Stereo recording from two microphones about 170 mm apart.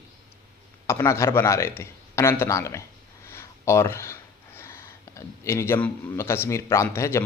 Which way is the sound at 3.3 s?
15° left (ahead or behind).